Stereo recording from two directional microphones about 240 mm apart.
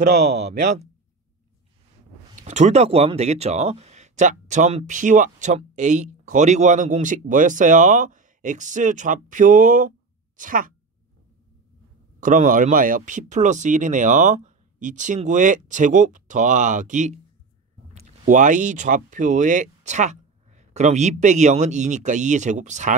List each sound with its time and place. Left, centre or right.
0.2 s speech: right
2.3 s speech: right
12.2 s speech: right
18.2 s speech: right